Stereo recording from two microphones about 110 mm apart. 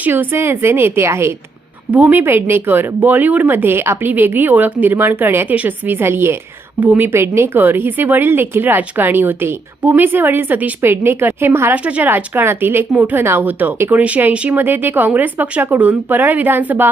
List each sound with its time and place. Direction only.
0.0 s speech: 20° right (ahead or behind)